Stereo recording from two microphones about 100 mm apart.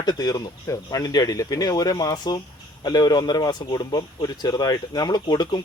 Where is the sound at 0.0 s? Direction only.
40° left (ahead or behind).